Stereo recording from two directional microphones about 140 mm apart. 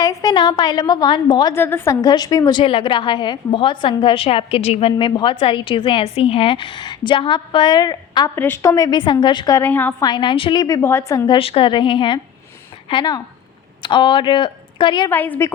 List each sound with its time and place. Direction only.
0.0 s a woman's voice: 25° left (ahead or behind)
1.5 s a woman's voice: 15° left (ahead or behind)
8.4 s a woman's voice: 15° left (ahead or behind); by 9.6 s 30° left (ahead or behind)
9.6 s a woman's voice: 15° left (ahead or behind)
10.0 s a woman's voice: 30° left (ahead or behind)
11.3 s a woman's voice: 40° left (ahead or behind)
15.1 s a woman's voice: 15° left (ahead or behind)